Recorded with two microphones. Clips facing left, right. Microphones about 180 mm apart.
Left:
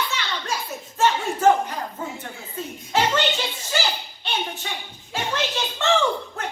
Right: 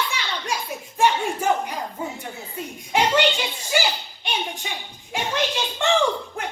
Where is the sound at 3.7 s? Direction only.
10° right (ahead or behind).